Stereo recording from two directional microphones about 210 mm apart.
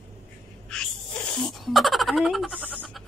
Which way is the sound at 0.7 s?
5° left (ahead or behind).